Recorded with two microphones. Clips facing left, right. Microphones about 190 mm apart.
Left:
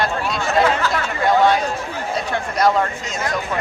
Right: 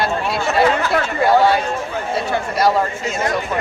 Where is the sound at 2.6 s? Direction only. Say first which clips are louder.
Even; 5° right (ahead or behind).